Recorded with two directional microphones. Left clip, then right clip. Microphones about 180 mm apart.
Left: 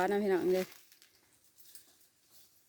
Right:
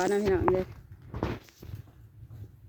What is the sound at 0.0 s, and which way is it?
Speech, 20° left (ahead or behind).